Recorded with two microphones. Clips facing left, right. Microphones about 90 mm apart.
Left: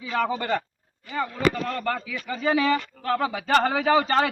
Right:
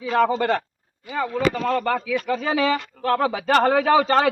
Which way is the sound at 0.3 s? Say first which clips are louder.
Right 5 dB; 85° right.